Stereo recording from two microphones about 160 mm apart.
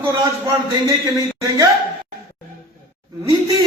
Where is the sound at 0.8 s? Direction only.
20° right (ahead or behind).